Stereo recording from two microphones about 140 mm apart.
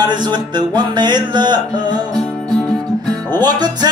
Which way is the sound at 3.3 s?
30° right (ahead or behind).